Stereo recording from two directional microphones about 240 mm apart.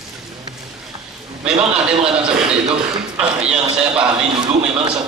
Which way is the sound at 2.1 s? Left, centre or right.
Centre.